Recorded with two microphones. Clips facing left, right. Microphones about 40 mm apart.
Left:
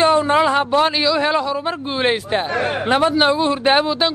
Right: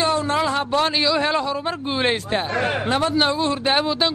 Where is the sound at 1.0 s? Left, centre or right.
Centre.